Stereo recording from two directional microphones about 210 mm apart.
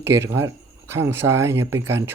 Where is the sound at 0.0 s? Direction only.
10° right (ahead or behind).